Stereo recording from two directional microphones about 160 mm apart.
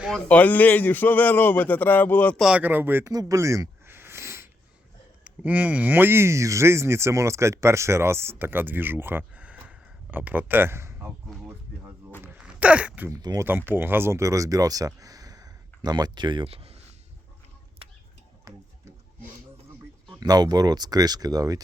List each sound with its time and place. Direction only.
0.0 s speech: 5° left (ahead or behind)
2.4 s speech: 5° right (ahead or behind)
12.2 s a sound: 5° right (ahead or behind)
13.1 s speech: 20° right (ahead or behind); by 16.8 s 40° right (ahead or behind)
18.5 s music: 20° right (ahead or behind)
20.1 s speech: 25° right (ahead or behind)